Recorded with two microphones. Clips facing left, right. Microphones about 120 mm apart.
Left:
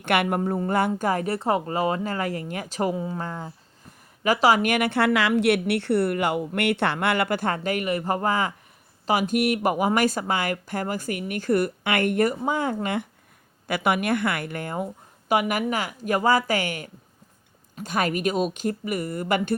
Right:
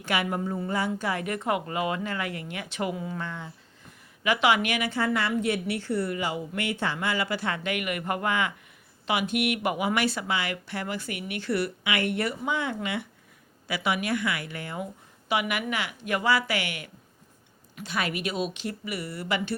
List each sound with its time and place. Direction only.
0.0 s a woman's voice: 60° left (ahead or behind)